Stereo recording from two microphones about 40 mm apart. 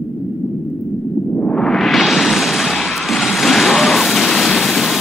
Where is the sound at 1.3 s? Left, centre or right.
Left.